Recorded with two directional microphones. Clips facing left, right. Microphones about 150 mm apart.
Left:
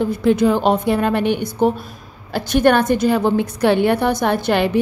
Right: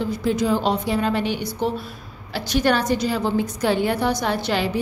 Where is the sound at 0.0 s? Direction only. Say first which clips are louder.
Left 6 dB; 60° left (ahead or behind).